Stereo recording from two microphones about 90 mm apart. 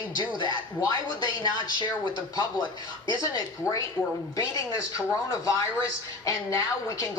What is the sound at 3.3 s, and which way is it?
Speech, 40° left (ahead or behind).